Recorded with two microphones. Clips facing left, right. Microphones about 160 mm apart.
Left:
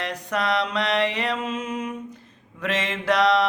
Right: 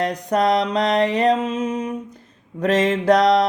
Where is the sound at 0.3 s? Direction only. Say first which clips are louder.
Right 6 dB; 45° right (ahead or behind).